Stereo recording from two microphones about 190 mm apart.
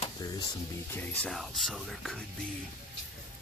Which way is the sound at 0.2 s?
20° left (ahead or behind).